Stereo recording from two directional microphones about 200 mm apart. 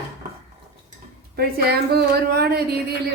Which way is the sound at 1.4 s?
50° right (ahead or behind).